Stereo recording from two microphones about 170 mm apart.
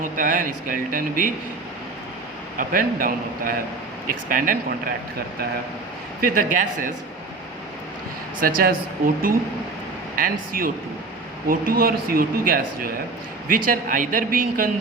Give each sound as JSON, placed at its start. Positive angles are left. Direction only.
{"t": 0.0, "sound": "speech", "side_deg": -50}
{"t": 2.6, "sound": "speech", "side_deg": -55}
{"t": 6.1, "sound": "speech", "side_deg": -55}
{"t": 8.4, "sound": "speech", "side_deg": -60}
{"t": 10.2, "sound": "speech", "side_deg": -55}